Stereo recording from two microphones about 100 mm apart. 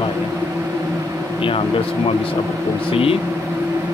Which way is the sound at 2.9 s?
70° left (ahead or behind).